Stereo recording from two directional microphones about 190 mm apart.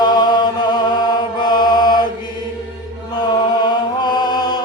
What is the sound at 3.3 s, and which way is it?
Music, 25° left (ahead or behind).